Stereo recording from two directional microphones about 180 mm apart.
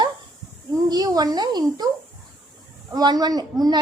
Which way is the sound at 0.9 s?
20° right (ahead or behind).